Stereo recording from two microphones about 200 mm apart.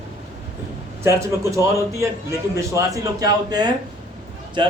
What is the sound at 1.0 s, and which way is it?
A man's voice, 15° right (ahead or behind).